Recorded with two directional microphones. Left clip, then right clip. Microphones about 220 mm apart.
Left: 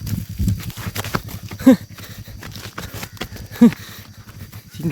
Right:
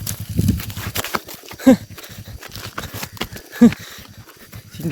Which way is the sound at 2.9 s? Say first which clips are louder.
Right 3 dB; 45° right (ahead or behind).